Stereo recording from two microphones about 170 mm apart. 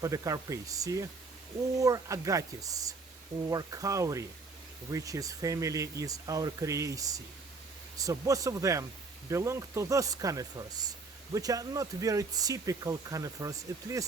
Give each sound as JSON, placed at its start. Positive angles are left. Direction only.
{"t": 0.0, "sound": "speech", "side_deg": -20}